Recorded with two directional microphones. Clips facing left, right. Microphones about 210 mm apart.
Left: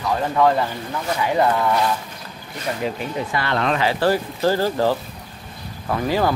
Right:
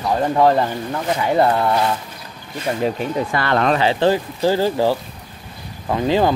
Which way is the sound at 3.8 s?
25° right (ahead or behind).